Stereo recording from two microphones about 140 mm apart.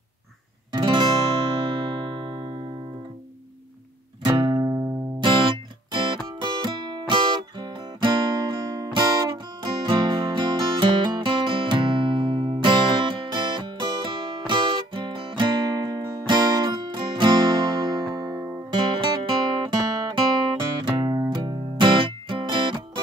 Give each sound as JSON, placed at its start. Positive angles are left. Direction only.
{"t": 0.7, "sound": "music", "side_deg": -30}
{"t": 4.2, "sound": "music", "side_deg": -35}
{"t": 7.6, "sound": "guitar", "side_deg": -30}
{"t": 19.2, "sound": "music", "side_deg": -30}